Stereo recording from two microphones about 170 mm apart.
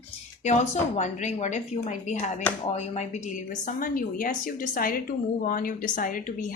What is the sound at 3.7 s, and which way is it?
A woman's voice, 55° left (ahead or behind).